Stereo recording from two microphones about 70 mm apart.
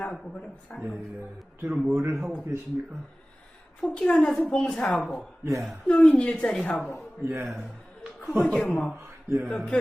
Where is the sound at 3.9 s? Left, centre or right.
Centre.